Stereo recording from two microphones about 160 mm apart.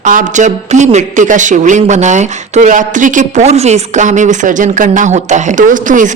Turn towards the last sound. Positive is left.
turn(degrees=-55)  # may be behind; listen again after turning